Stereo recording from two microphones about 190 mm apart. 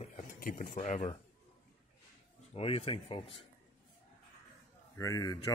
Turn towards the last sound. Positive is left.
turn(degrees=20)  # may be behind; listen again after turning